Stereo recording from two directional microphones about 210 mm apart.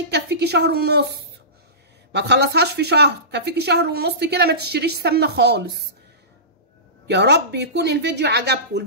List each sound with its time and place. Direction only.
0.1 s a woman's voice: 50° right (ahead or behind)
7.1 s speech: 55° right (ahead or behind)